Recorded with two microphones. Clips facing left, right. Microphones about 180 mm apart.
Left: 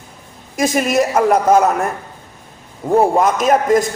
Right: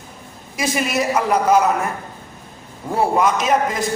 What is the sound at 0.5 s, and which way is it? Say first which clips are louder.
A man's voice: left 6 dB; 45° left (ahead or behind).